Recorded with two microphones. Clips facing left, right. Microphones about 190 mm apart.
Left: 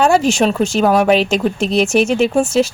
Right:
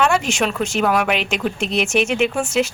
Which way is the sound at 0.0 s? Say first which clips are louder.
Left 6 dB; 35° left (ahead or behind).